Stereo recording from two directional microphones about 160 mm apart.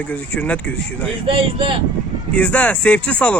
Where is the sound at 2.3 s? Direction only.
10° left (ahead or behind).